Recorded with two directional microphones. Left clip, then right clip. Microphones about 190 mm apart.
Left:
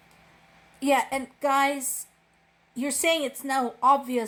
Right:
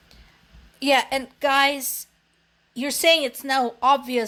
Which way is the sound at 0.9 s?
45° right (ahead or behind).